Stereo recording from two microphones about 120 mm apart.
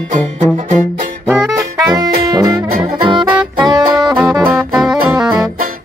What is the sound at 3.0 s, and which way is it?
Music, 40° right (ahead or behind).